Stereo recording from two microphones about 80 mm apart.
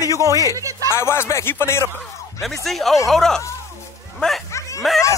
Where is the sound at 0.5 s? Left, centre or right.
Right.